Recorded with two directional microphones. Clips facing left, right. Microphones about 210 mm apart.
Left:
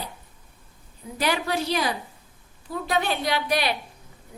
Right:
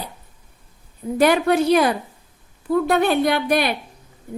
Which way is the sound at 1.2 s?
55° right (ahead or behind).